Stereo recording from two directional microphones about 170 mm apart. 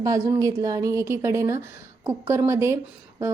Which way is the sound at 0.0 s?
20° right (ahead or behind).